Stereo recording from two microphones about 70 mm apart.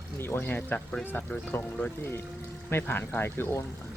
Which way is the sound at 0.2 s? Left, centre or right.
Left.